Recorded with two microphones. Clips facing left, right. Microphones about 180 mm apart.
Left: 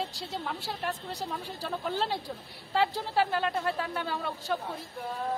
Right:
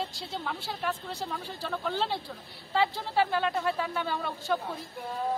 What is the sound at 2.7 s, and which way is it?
Speech, 5° left (ahead or behind).